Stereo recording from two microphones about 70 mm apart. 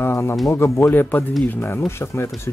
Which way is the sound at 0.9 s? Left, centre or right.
Left.